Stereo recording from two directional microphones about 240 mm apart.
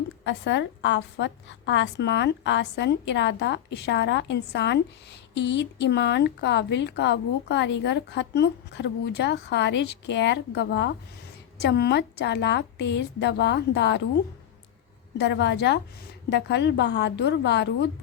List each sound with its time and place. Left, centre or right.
0.3 s speech: left
15.2 s speech: left